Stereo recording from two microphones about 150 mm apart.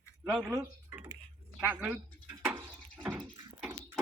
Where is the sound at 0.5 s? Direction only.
15° right (ahead or behind).